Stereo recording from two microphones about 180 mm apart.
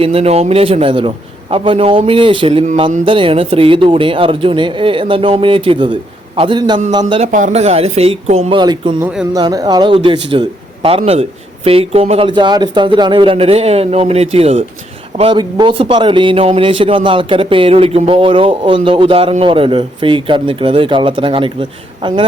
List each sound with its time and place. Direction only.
0.0 s speech: 35° right (ahead or behind)
7.3 s speech: 45° right (ahead or behind); by 22.3 s 25° right (ahead or behind)